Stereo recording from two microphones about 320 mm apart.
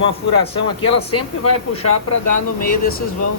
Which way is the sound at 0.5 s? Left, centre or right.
Centre.